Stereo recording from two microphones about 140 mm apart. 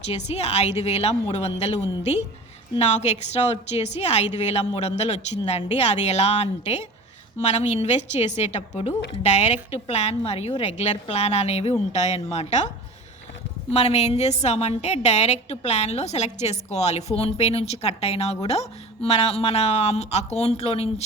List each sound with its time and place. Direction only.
0.0 s a woman's voice: 50° left (ahead or behind)